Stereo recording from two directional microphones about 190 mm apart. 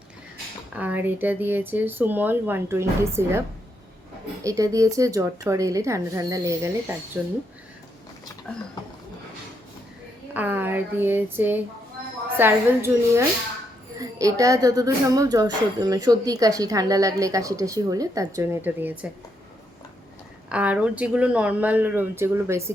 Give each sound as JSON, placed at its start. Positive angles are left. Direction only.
{"t": 0.7, "sound": "speech", "side_deg": -10}
{"t": 4.4, "sound": "speech", "side_deg": -15}
{"t": 10.3, "sound": "speech", "side_deg": -10}
{"t": 20.5, "sound": "speech", "side_deg": -5}